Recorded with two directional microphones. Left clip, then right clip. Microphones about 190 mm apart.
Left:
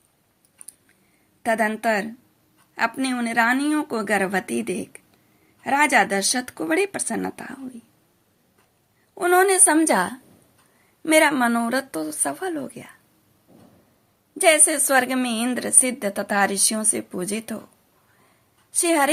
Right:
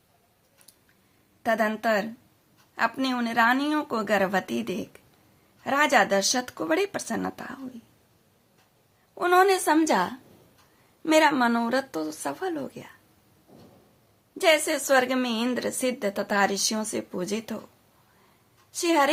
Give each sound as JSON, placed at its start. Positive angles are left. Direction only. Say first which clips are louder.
{"t": 1.4, "sound": "a woman's voice", "louder": "left 3 dB", "side_deg": 10}
{"t": 9.1, "sound": "a woman's voice", "louder": "left 2 dB", "side_deg": 10}
{"t": 14.3, "sound": "a woman's voice", "louder": "left 4 dB", "side_deg": 15}
{"t": 18.7, "sound": "a woman's voice", "louder": "left 2 dB", "side_deg": 15}